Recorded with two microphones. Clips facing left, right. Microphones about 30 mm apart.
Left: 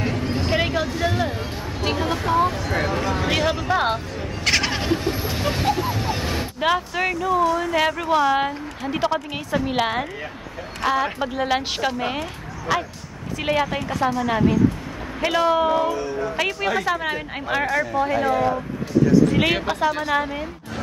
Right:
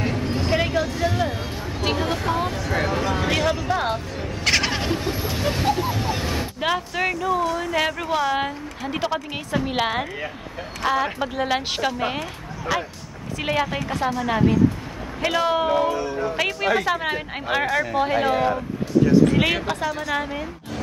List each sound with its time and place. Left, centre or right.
0.0 s a sound: centre
4.2 s bird: centre
8.1 s a woman's voice: centre
17.9 s speech: right
19.3 s a woman's voice: centre